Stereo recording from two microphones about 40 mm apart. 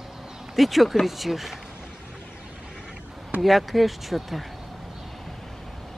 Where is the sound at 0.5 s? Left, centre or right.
Centre.